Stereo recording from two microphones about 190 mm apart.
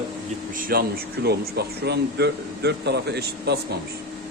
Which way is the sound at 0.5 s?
50° right (ahead or behind).